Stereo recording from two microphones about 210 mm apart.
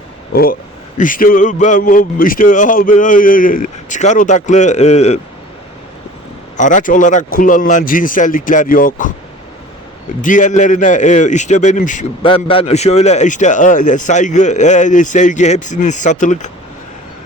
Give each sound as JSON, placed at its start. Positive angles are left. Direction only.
{"t": 0.9, "sound": "a man's voice", "side_deg": 40}
{"t": 6.6, "sound": "a man's voice", "side_deg": 35}
{"t": 10.2, "sound": "a man's voice", "side_deg": 40}
{"t": 12.2, "sound": "a man's voice", "side_deg": 25}